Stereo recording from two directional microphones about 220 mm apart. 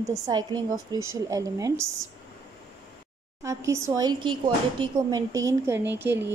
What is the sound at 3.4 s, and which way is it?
Speech, 15° right (ahead or behind).